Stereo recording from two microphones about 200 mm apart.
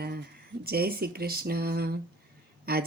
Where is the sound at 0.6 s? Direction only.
50° right (ahead or behind).